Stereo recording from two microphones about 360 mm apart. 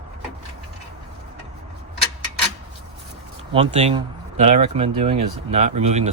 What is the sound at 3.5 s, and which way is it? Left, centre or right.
Speech, centre.